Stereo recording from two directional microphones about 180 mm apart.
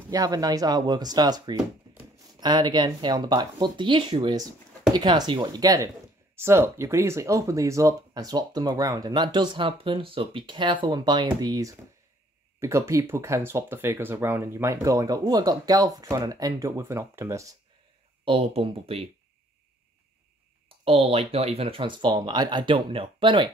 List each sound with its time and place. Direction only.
0.1 s speech: 20° right (ahead or behind)
18.2 s speech: 35° right (ahead or behind)
20.6 s speech: 30° right (ahead or behind)